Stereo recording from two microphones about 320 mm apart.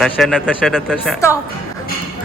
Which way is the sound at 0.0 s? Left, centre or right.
Centre.